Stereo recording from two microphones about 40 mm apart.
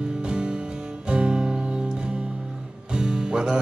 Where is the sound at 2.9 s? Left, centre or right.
Centre.